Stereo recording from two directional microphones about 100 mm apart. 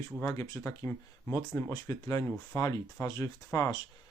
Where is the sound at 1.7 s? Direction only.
35° left (ahead or behind).